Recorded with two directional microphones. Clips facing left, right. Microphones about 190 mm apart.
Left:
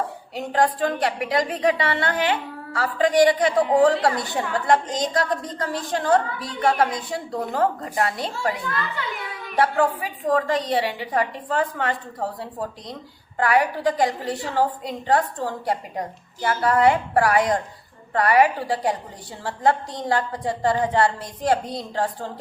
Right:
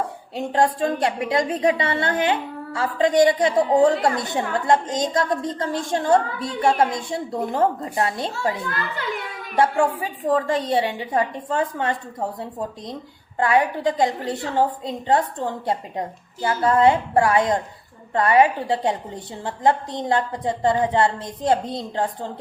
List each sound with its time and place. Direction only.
0.3 s a woman's voice: 25° right (ahead or behind)
9.6 s a woman's voice: 25° right (ahead or behind)